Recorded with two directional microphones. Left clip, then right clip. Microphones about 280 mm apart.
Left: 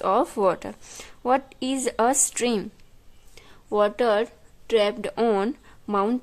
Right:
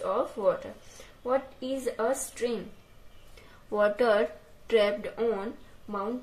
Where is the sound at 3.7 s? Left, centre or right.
Left.